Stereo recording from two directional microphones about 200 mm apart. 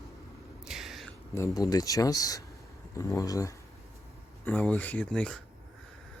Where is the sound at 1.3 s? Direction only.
15° left (ahead or behind).